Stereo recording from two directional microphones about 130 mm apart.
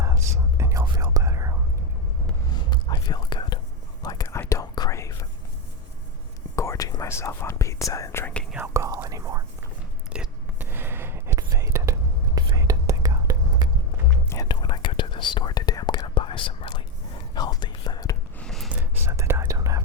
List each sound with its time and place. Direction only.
0.0 s whispering: 25° right (ahead or behind)
2.5 s whispering: 35° left (ahead or behind)
6.6 s whispering: 25° left (ahead or behind)
8.5 s whispering: 20° right (ahead or behind)
10.1 s whispering: 10° right (ahead or behind); by 13.7 s 30° right (ahead or behind)
14.4 s whispering: 35° left (ahead or behind)
16.1 s whispering: 40° left (ahead or behind)
18.3 s a sound: 5° left (ahead or behind)
18.7 s whispering: 20° right (ahead or behind)